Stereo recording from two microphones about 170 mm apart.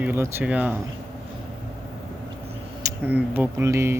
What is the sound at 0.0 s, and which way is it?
Speech, 15° right (ahead or behind).